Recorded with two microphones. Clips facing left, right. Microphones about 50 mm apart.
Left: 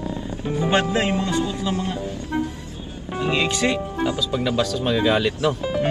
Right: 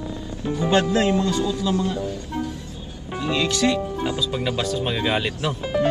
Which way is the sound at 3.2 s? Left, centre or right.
Left.